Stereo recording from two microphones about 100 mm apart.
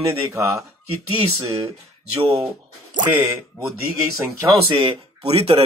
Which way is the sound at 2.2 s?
65° right (ahead or behind).